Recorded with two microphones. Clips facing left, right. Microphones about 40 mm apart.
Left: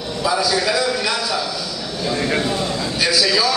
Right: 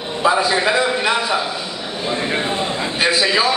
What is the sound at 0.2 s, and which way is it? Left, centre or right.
A man's voice, right.